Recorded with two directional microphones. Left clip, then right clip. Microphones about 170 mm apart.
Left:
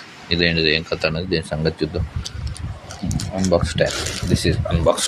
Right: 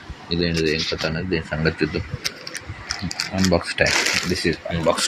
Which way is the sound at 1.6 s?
10° left (ahead or behind).